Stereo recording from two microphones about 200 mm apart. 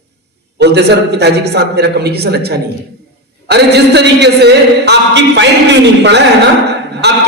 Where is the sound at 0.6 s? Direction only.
55° right (ahead or behind).